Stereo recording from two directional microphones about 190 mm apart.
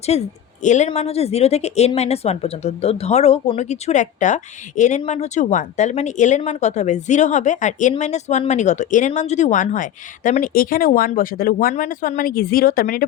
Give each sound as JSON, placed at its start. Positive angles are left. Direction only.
{"t": 0.1, "sound": "speech", "side_deg": 35}